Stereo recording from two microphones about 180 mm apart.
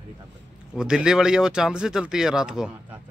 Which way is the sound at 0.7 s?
5° right (ahead or behind).